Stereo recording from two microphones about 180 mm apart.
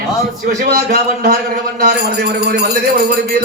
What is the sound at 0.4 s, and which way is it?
A man's voice, 60° right (ahead or behind).